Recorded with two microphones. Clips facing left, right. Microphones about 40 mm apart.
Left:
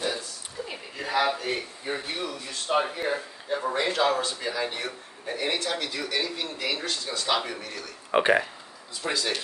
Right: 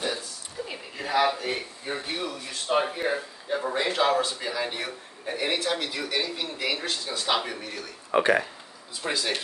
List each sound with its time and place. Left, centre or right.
0.7 s speech: centre
8.1 s speech: centre
9.0 s speech: centre